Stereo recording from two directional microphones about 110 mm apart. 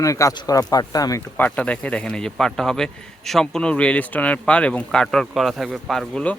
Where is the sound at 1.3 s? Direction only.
15° left (ahead or behind).